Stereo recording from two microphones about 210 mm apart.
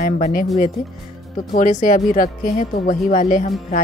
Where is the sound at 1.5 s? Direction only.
35° left (ahead or behind).